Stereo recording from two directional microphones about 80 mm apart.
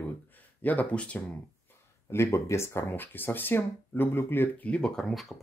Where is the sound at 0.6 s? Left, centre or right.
Centre.